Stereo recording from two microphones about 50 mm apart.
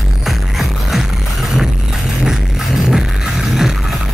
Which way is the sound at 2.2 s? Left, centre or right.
Centre.